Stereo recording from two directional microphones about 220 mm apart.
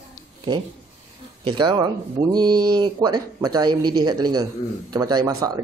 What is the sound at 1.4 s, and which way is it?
A man's voice, 20° right (ahead or behind).